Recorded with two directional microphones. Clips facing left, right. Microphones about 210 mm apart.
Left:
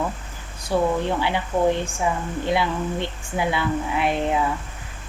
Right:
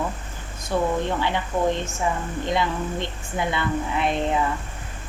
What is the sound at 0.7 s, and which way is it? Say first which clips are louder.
Speech: left 2 dB; 10° left (ahead or behind).